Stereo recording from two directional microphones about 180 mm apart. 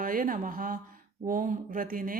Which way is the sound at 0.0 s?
50° right (ahead or behind).